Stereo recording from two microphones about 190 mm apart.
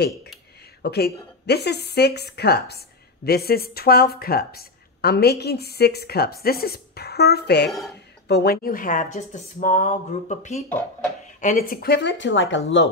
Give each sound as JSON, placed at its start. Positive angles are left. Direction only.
{"t": 0.8, "sound": "speech", "side_deg": 55}